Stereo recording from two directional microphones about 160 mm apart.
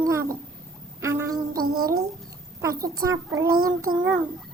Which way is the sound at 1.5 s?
70° right (ahead or behind).